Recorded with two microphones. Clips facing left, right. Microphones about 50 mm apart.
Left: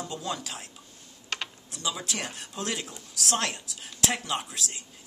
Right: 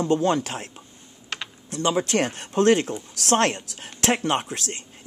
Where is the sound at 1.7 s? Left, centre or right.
Right.